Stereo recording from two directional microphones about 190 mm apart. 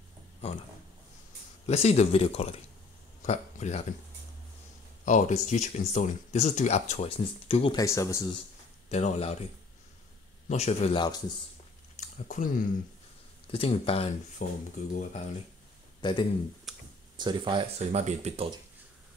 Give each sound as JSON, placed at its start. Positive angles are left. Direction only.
{"t": 1.7, "sound": "speech", "side_deg": 35}
{"t": 5.0, "sound": "speech", "side_deg": 40}
{"t": 7.8, "sound": "speech", "side_deg": 15}
{"t": 8.8, "sound": "speech", "side_deg": 35}
{"t": 10.5, "sound": "a man's voice", "side_deg": 35}
{"t": 12.0, "sound": "speech", "side_deg": 40}
{"t": 13.5, "sound": "speech", "side_deg": 30}
{"t": 14.4, "sound": "speech", "side_deg": 45}
{"t": 16.0, "sound": "speech", "side_deg": 25}
{"t": 16.7, "sound": "computer keyboard", "side_deg": 0}
{"t": 17.2, "sound": "speech", "side_deg": -25}